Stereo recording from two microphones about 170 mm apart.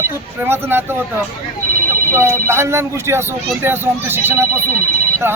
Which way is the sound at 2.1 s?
15° right (ahead or behind).